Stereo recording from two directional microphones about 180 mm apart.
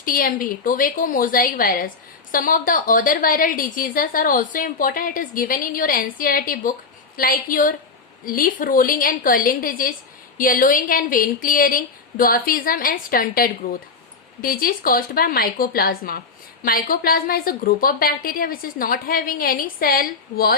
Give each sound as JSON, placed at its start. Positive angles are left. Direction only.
{"t": 0.0, "sound": "a woman's voice", "side_deg": 50}